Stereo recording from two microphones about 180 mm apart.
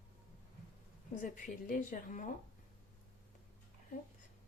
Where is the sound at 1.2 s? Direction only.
45° left (ahead or behind).